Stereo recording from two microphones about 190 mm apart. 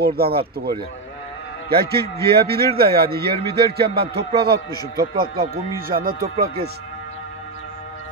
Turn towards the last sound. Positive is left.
turn(degrees=-55)  # may be behind; listen again after turning